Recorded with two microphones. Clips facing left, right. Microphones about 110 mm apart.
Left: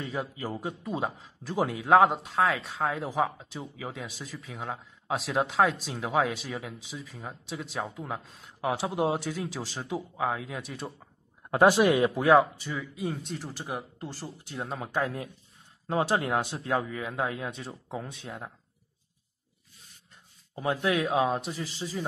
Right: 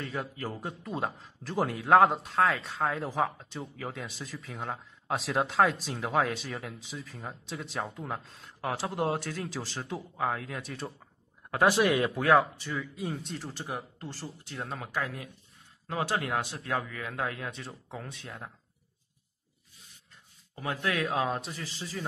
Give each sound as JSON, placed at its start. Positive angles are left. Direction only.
{"t": 0.2, "sound": "a man's voice", "side_deg": 0}
{"t": 11.5, "sound": "speech", "side_deg": 25}
{"t": 12.7, "sound": "a man's voice", "side_deg": 0}
{"t": 14.6, "sound": "speech", "side_deg": 25}
{"t": 20.5, "sound": "speech", "side_deg": 20}